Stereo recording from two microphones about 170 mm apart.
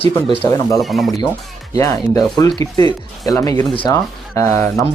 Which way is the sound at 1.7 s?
20° left (ahead or behind).